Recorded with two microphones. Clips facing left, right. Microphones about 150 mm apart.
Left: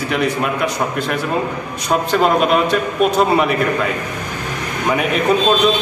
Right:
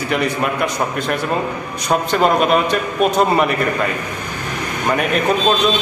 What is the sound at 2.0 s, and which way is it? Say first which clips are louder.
A man's voice: even; centre (ahead or behind).